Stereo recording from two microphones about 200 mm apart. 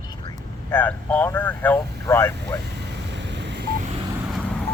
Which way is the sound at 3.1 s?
60° right (ahead or behind).